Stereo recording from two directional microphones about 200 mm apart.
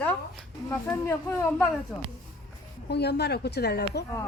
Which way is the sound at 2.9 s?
55° left (ahead or behind).